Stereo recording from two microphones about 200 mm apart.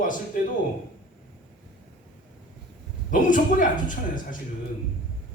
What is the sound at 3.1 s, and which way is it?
Speech, 40° left (ahead or behind).